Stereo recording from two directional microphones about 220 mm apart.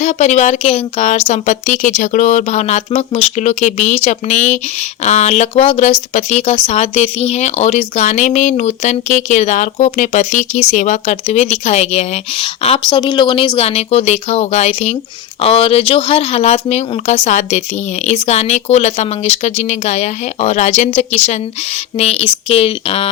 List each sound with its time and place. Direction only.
0.0 s speech: 30° left (ahead or behind)